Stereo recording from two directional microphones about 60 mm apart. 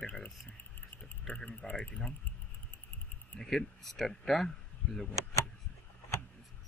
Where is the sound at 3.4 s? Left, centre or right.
Centre.